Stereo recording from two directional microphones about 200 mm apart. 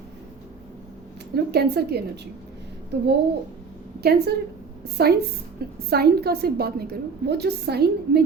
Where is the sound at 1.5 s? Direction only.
55° right (ahead or behind).